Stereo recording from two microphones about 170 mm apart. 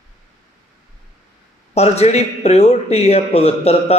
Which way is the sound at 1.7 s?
40° left (ahead or behind).